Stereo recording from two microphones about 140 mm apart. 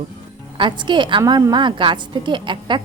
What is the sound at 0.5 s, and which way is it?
A woman's voice, 35° right (ahead or behind).